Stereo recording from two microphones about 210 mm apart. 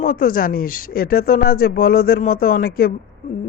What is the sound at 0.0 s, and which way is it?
Speech, 45° left (ahead or behind).